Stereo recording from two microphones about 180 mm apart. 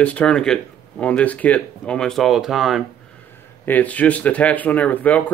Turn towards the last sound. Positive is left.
turn(degrees=10)  # may be behind; listen again after turning